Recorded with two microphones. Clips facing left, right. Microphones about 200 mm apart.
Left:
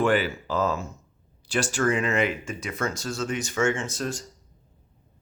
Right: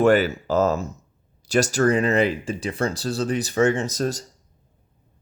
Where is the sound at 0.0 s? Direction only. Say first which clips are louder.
Right 6 dB; 45° right (ahead or behind).